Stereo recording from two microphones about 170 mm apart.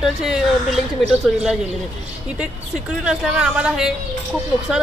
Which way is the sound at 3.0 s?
5° right (ahead or behind).